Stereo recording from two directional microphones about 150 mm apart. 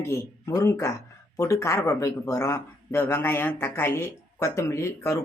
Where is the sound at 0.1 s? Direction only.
20° left (ahead or behind).